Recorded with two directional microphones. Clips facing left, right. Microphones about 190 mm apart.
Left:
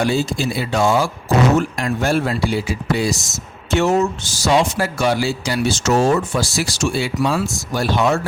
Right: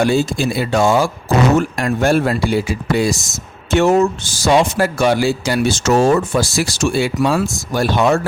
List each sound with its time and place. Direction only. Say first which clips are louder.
0.0 s speech: right 3 dB; 50° right (ahead or behind)